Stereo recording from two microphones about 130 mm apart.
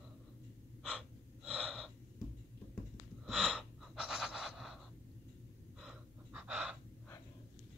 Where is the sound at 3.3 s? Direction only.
Centre (ahead or behind).